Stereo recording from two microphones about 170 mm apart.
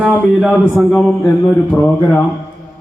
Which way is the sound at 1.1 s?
15° left (ahead or behind).